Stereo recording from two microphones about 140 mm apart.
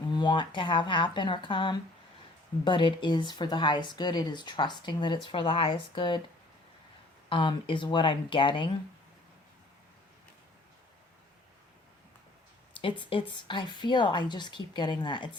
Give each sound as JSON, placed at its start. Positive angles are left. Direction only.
{"t": 0.1, "sound": "speech", "side_deg": 30}
{"t": 7.3, "sound": "speech", "side_deg": 35}
{"t": 12.7, "sound": "speech", "side_deg": 40}